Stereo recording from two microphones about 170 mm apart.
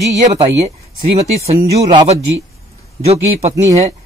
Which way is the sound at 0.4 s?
40° right (ahead or behind).